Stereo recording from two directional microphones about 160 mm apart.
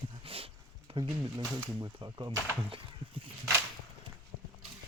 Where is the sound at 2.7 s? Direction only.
35° right (ahead or behind).